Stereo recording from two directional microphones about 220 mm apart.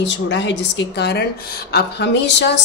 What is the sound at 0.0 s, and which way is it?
A woman's voice, 55° left (ahead or behind).